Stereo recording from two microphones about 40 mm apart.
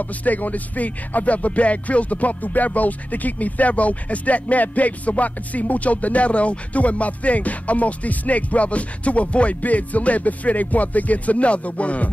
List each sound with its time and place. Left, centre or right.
0.0 s speech: left